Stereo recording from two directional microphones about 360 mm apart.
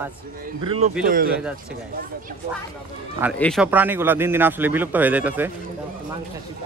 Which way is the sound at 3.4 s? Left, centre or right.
Centre.